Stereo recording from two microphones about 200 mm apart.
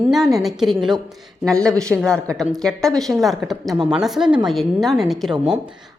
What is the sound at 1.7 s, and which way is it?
Speech, 15° right (ahead or behind).